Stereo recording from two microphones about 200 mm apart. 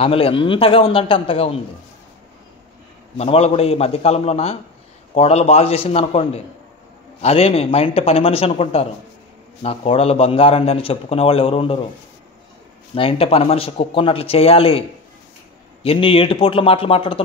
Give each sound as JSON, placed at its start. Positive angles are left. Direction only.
{"t": 0.0, "sound": "a man's voice", "side_deg": 30}
{"t": 3.2, "sound": "a man's voice", "side_deg": 30}
{"t": 12.9, "sound": "a man's voice", "side_deg": 25}